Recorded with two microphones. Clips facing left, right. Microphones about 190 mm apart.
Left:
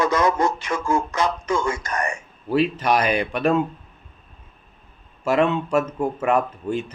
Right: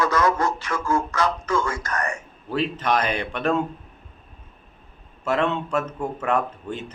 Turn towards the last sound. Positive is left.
turn(degrees=10)  # may be behind; listen again after turning